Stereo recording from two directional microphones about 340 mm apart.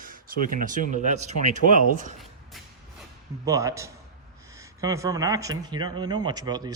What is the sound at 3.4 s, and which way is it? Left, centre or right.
Speech, centre.